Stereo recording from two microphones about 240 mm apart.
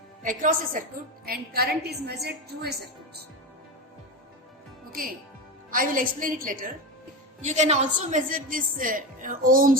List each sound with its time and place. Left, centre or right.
0.2 s a woman's voice: right
4.9 s a woman's voice: right